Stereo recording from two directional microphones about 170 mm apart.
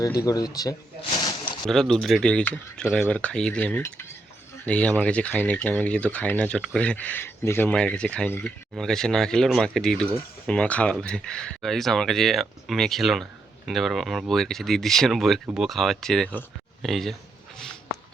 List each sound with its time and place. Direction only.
0.0 s speech: 20° left (ahead or behind)
1.6 s speech: 5° left (ahead or behind)